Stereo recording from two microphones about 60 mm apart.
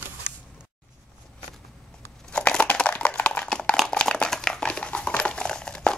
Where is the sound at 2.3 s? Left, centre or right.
Centre.